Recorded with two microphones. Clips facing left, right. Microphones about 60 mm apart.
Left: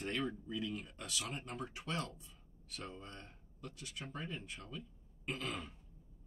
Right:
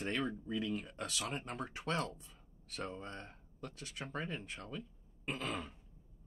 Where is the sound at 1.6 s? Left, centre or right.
Right.